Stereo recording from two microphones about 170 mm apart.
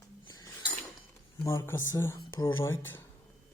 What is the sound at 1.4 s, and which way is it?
Speech, 15° left (ahead or behind).